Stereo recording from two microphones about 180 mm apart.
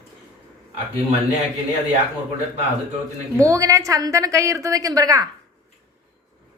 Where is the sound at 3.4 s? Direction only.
15° right (ahead or behind).